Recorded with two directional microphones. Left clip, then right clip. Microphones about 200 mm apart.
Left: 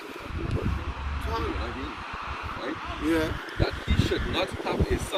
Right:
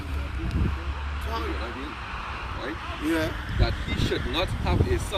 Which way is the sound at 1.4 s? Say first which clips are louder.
Even; 35° left (ahead or behind).